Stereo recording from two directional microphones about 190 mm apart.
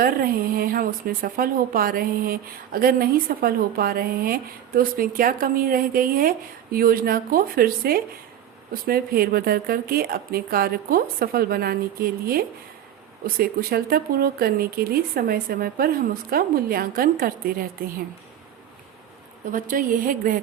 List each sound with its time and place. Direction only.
0.0 s a woman's voice: 50° right (ahead or behind)
19.5 s a woman's voice: 45° right (ahead or behind)